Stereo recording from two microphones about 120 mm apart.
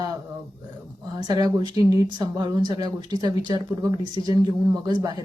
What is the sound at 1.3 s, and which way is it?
Speech, 30° right (ahead or behind).